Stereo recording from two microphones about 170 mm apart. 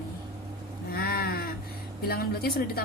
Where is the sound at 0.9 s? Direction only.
65° left (ahead or behind).